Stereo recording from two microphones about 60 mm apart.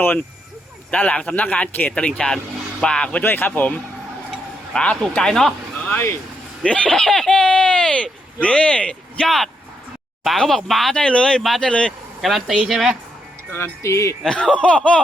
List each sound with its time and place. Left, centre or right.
0.9 s speech: left
3.2 s speech: left
4.7 s speech: centre
6.6 s speech: centre
9.2 s speech: centre
11.0 s speech: centre
12.2 s speech: centre
13.5 s speech: left
14.3 s speech: centre